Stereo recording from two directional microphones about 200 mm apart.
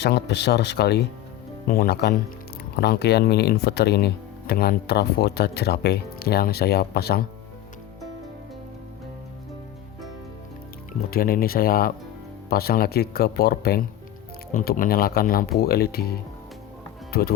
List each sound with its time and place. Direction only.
0.0 s speech: 55° left (ahead or behind)
11.1 s speech: 50° left (ahead or behind)